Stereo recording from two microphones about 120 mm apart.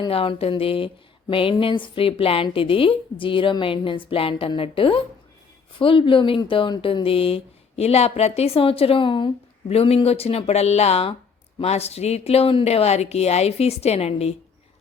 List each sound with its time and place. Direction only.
0.1 s a woman's voice: 50° left (ahead or behind)
9.6 s a woman's voice: 60° left (ahead or behind)